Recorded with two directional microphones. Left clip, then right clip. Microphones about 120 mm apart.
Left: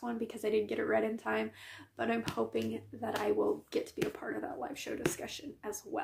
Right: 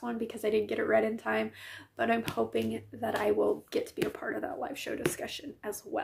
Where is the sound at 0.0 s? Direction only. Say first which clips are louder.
Right 3 dB; 20° right (ahead or behind).